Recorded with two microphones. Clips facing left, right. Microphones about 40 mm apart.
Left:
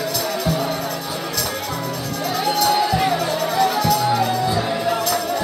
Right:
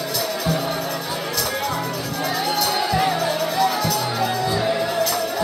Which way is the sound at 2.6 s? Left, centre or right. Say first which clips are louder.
Left 4 dB; centre.